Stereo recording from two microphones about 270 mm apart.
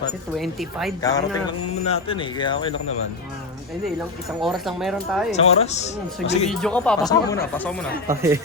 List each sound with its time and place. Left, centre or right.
0.3 s speech: centre
1.0 s speech: centre
4.4 s speech: centre
5.3 s speech: left
6.5 s speech: centre
8.0 s speech: centre